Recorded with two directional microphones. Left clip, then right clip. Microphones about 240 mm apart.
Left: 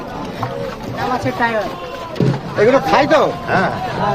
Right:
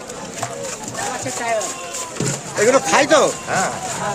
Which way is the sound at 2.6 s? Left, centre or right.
Centre.